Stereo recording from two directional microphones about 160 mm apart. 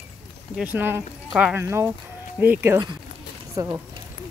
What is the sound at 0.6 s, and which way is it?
Speech, 10° right (ahead or behind).